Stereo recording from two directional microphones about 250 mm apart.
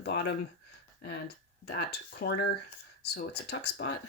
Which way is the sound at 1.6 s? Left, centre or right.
Left.